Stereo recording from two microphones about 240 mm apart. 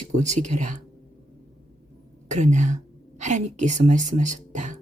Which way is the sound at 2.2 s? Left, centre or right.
Right.